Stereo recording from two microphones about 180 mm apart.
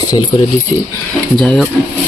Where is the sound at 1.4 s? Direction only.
5° left (ahead or behind).